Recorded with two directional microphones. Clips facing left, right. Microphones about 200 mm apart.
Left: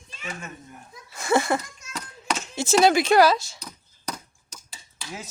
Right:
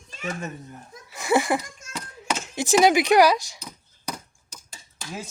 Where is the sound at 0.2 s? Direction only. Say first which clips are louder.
Right 6 dB; 45° right (ahead or behind).